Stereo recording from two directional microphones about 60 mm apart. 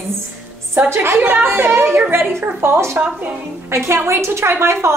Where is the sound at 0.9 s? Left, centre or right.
Right.